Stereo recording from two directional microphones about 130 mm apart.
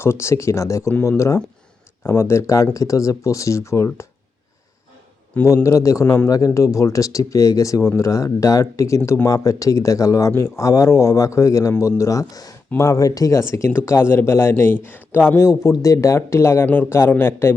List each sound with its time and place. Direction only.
0.0 s speech: 20° left (ahead or behind)
5.6 s speech: 25° left (ahead or behind)